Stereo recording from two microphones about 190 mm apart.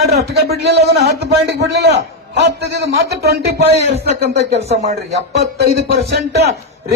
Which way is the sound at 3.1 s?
55° right (ahead or behind).